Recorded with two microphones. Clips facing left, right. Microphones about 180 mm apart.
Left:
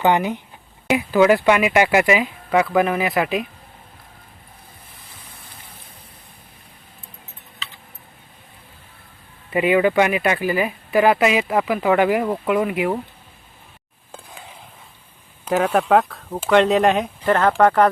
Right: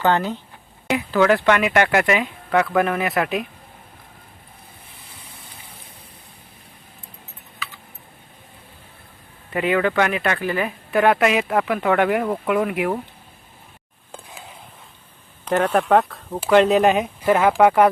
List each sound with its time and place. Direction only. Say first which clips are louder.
0.0 s speech: left 2 dB; 15° left (ahead or behind); by 3.4 s centre (ahead or behind)
9.5 s speech: left 3 dB; 10° left (ahead or behind)
14.1 s a sound: even; centre (ahead or behind)
15.4 s speech: even; 5° left (ahead or behind)